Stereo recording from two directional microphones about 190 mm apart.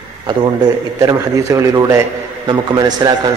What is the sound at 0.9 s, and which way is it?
A man's voice, 15° right (ahead or behind).